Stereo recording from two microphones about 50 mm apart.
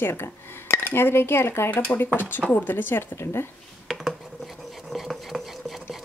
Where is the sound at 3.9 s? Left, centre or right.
Centre.